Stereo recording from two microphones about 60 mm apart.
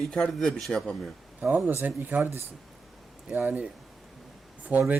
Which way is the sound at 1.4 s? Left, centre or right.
Right.